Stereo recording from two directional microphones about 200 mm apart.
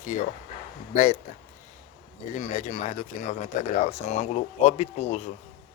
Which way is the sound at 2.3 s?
35° left (ahead or behind).